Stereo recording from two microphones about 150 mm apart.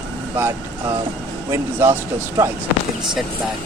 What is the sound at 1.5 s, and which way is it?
Speech, 15° right (ahead or behind).